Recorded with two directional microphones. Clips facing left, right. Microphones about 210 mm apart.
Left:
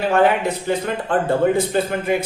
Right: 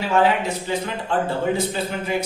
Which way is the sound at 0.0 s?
55° left (ahead or behind).